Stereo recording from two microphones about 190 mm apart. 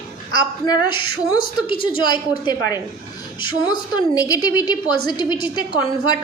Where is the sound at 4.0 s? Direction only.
20° left (ahead or behind).